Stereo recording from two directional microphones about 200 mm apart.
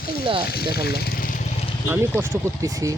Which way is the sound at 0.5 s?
50° left (ahead or behind).